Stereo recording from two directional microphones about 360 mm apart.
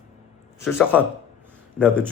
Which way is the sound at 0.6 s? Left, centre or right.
Centre.